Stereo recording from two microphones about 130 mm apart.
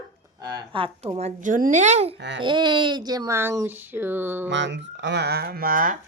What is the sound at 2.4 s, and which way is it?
Speech, 40° right (ahead or behind).